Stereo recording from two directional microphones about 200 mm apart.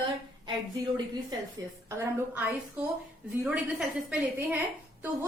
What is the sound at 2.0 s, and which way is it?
A woman's voice, 10° right (ahead or behind).